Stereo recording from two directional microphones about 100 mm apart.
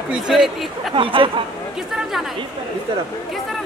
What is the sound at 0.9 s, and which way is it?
Speech, 60° right (ahead or behind).